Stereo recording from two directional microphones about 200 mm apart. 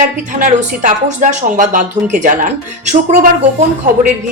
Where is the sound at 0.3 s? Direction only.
35° right (ahead or behind).